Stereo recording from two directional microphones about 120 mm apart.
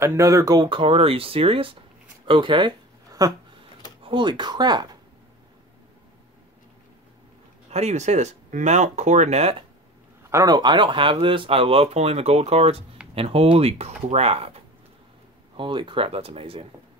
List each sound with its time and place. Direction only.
0.0 s speech: 25° right (ahead or behind); by 2.7 s 40° right (ahead or behind)
3.1 s a sound: 30° right (ahead or behind)
4.0 s speech: 40° right (ahead or behind)
7.7 s speech: 65° right (ahead or behind)
10.3 s speech: 35° right (ahead or behind); by 14.6 s 55° right (ahead or behind)
15.5 s speech: 45° right (ahead or behind)